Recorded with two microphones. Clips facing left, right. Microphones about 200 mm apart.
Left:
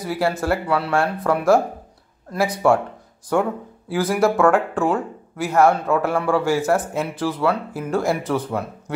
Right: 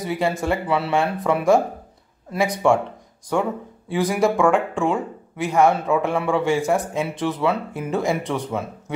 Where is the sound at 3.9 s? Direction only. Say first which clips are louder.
Left 1 dB; centre (ahead or behind).